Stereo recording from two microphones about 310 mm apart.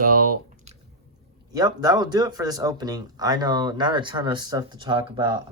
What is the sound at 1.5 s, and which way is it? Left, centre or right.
Speech, centre.